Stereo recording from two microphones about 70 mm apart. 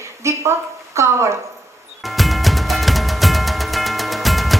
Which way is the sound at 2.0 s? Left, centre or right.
Centre.